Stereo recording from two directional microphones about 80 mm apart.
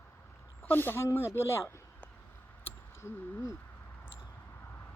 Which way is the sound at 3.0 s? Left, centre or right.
Left.